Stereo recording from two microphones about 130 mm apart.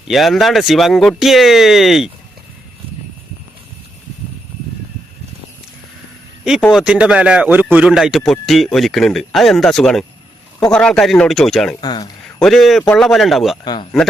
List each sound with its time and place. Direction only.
0.1 s speech: centre (ahead or behind)
6.7 s speech: 5° right (ahead or behind)
7.9 s speech: centre (ahead or behind)
11.8 s speech: 30° left (ahead or behind)
12.4 s speech: centre (ahead or behind)